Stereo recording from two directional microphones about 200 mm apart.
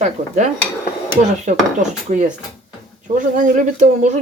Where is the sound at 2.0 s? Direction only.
40° right (ahead or behind).